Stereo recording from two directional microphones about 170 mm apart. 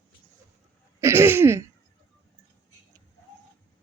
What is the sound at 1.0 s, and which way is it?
Throat clearing, 15° right (ahead or behind).